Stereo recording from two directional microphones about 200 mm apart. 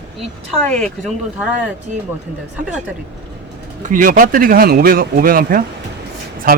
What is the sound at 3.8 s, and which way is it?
Speech, 40° right (ahead or behind).